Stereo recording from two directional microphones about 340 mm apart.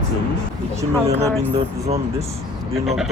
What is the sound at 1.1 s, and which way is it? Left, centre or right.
Speech, centre.